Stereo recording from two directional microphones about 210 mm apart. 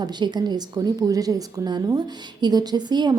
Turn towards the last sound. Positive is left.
turn(degrees=-20)  # may be behind; listen again after turning